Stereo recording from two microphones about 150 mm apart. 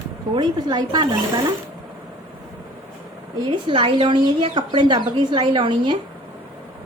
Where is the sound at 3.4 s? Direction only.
35° right (ahead or behind).